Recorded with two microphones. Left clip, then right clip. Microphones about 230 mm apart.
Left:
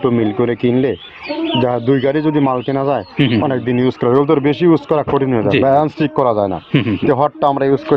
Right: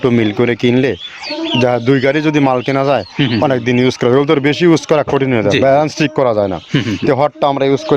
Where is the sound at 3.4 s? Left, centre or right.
Right.